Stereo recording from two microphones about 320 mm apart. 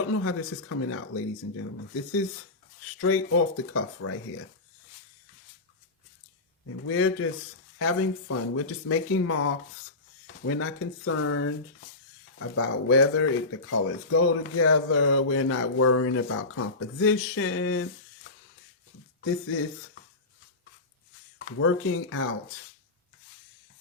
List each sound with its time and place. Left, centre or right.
0.1 s speech: left
3.7 s speech: left
6.8 s speech: left
21.3 s speech: left